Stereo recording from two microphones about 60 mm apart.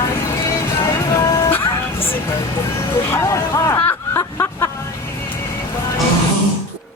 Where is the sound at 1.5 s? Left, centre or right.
Left.